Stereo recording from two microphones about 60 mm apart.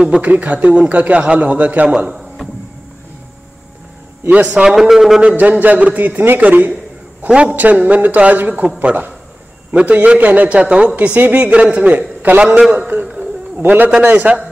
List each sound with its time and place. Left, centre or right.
0.2 s a man's voice: right
4.3 s a man's voice: right
4.6 s a man's voice: centre
5.3 s a man's voice: right
10.6 s a woman's voice: centre
11.1 s a man's voice: right
13.0 s a sound: centre
13.6 s a man's voice: right